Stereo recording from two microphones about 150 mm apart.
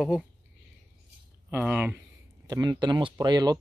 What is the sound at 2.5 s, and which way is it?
Speech, 25° right (ahead or behind).